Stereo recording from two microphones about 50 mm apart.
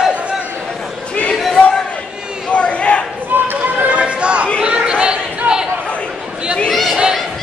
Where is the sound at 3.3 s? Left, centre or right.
Right.